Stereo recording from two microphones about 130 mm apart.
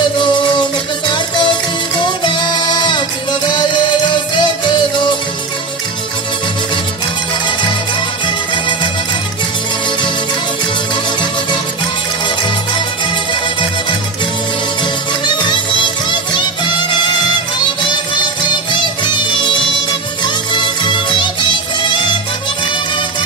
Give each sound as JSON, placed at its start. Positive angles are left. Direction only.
{"t": 0.0, "sound": "music", "side_deg": 35}
{"t": 13.3, "sound": "music", "side_deg": 40}
{"t": 15.2, "sound": "music", "side_deg": 35}